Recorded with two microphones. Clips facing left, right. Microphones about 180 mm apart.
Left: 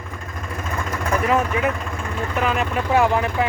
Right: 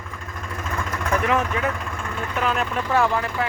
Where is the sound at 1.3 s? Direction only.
15° left (ahead or behind).